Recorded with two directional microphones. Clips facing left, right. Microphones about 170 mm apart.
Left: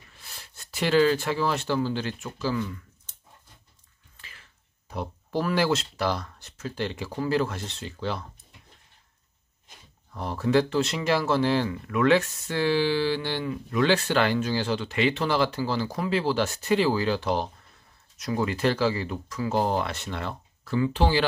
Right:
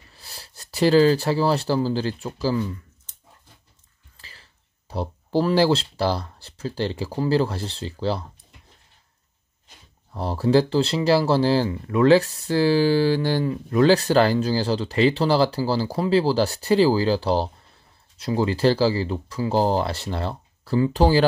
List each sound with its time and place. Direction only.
0.1 s speech: 35° right (ahead or behind)
4.2 s speech: 35° right (ahead or behind)
10.1 s speech: 30° right (ahead or behind)